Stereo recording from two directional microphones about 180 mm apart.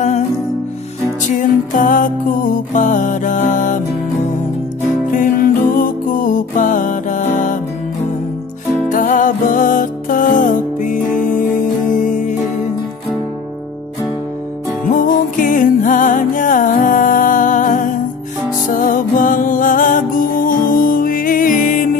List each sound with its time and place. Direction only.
1.3 s music: 45° left (ahead or behind)
5.1 s music: 50° left (ahead or behind)
8.8 s music: 45° left (ahead or behind)
14.9 s music: 45° left (ahead or behind)